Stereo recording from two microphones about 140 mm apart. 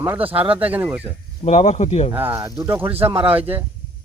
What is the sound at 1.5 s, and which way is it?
Speech, 55° left (ahead or behind).